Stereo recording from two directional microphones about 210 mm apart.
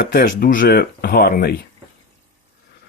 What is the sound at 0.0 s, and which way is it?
Speech, 50° left (ahead or behind).